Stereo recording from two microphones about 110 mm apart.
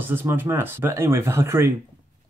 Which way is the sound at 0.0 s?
20° right (ahead or behind).